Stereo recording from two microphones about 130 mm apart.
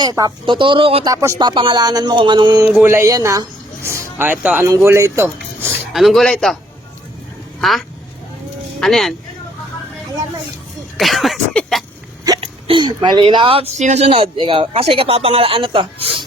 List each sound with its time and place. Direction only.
0.0 s speech: 30° right (ahead or behind)
1.0 s speech: 25° right (ahead or behind)
1.4 s speech: 35° right (ahead or behind)
2.8 s speech: 20° right (ahead or behind)
5.9 s a sound: centre (ahead or behind)
7.6 s a sound: centre (ahead or behind)
10.9 s a sound: centre (ahead or behind)
12.4 s speech: 40° right (ahead or behind)
13.7 s speech: 60° right (ahead or behind); by 16.2 s 45° right (ahead or behind)